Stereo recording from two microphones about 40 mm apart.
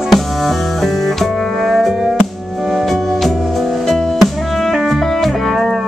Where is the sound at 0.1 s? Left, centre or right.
Centre.